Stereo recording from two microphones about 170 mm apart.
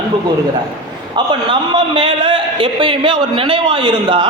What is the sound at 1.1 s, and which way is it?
A man's voice, 30° right (ahead or behind).